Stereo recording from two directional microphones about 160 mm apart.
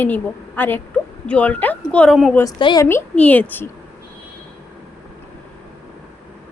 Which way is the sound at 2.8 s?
10° left (ahead or behind).